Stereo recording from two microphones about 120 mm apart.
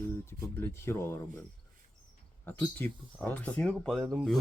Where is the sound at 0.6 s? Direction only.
20° left (ahead or behind).